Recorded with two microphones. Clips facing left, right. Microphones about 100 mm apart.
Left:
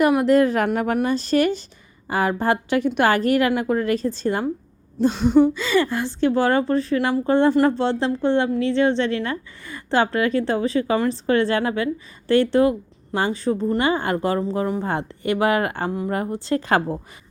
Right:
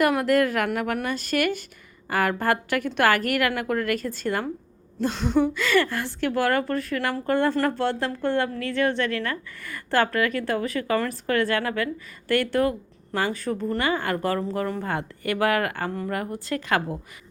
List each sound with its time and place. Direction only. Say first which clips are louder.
0.0 s speech: left 4 dB; 20° left (ahead or behind)